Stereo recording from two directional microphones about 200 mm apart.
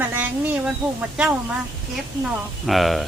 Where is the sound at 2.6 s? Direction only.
Centre (ahead or behind).